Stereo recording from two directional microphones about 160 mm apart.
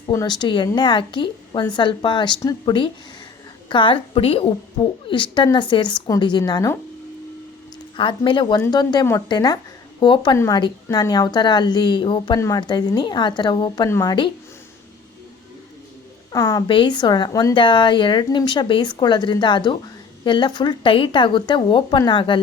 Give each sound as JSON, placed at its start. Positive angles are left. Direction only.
{"t": 0.1, "sound": "speech", "side_deg": 25}
{"t": 7.9, "sound": "speech", "side_deg": 30}
{"t": 16.3, "sound": "speech", "side_deg": 20}